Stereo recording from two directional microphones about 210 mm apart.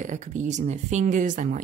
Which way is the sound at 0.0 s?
35° right (ahead or behind).